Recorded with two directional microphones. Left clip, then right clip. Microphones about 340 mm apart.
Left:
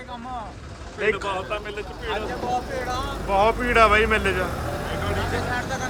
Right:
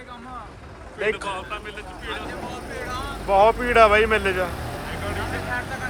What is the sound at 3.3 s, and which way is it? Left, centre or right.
Speech, centre.